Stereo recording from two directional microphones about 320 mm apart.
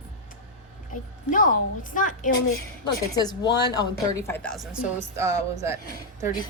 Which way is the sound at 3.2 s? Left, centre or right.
Centre.